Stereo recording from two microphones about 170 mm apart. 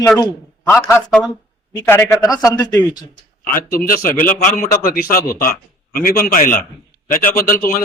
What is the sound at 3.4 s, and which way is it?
A man's voice, 55° left (ahead or behind).